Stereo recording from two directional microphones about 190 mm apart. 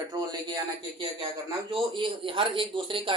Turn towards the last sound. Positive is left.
turn(degrees=-25)  # may be behind; listen again after turning